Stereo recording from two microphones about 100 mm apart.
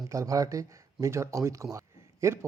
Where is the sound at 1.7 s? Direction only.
30° right (ahead or behind).